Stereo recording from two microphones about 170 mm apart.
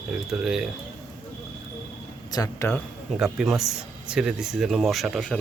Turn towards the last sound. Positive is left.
turn(degrees=0)  # may be behind; listen again after turning